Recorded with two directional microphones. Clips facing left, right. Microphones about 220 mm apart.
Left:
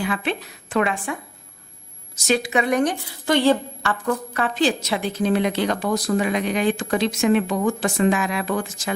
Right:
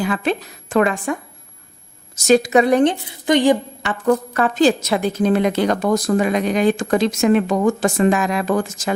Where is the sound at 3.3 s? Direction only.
15° right (ahead or behind).